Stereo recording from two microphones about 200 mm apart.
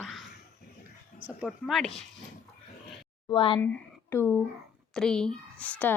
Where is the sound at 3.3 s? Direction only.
25° left (ahead or behind).